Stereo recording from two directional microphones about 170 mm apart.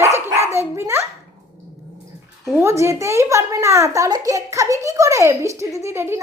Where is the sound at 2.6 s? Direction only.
15° right (ahead or behind).